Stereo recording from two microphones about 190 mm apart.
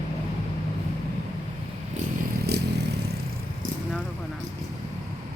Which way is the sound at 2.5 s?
60° right (ahead or behind).